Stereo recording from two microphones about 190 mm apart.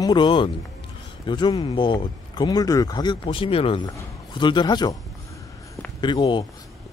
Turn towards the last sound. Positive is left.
turn(degrees=25)  # may be behind; listen again after turning